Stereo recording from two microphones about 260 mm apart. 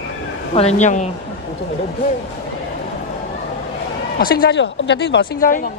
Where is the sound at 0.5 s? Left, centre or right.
Left.